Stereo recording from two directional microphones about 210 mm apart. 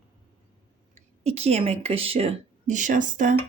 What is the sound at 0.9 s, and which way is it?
Speech, 30° right (ahead or behind).